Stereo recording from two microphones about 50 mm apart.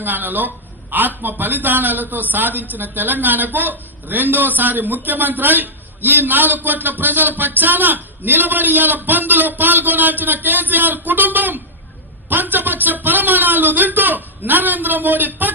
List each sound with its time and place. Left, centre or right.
0.0 s a man's voice: right